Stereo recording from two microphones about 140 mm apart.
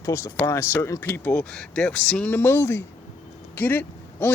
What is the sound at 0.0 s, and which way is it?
A man's voice, 20° left (ahead or behind).